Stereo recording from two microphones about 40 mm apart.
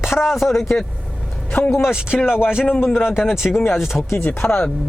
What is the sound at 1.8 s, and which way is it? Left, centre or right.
Speech, centre.